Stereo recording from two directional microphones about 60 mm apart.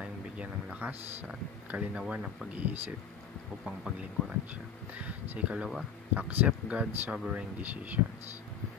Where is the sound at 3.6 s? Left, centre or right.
Centre.